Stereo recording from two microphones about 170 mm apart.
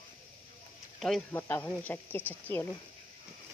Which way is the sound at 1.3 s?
15° left (ahead or behind).